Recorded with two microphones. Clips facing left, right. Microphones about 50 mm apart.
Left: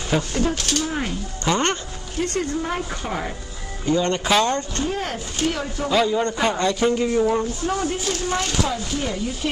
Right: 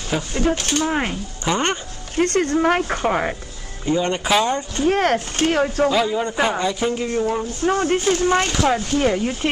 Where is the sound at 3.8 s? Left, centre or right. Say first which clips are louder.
Even; centre.